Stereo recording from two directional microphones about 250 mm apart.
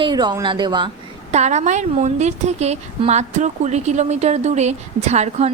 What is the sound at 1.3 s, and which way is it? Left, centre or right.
Speech, right.